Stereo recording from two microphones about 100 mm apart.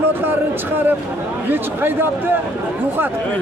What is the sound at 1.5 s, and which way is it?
Speech, 20° right (ahead or behind).